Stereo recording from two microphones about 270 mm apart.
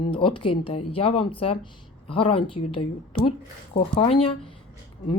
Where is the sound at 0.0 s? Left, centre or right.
Centre.